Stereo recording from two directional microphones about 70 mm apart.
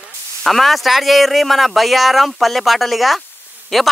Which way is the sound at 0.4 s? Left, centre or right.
Centre.